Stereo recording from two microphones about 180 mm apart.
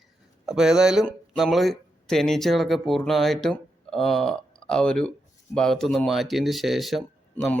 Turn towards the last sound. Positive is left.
turn(degrees=0)  # may be behind; listen again after turning